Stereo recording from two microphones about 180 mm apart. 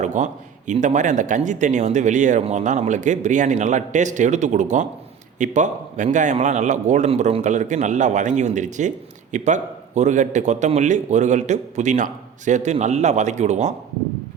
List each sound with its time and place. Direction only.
0.0 s a man's voice: 45° right (ahead or behind)